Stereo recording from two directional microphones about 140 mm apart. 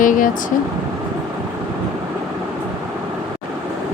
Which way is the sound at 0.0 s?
70° left (ahead or behind).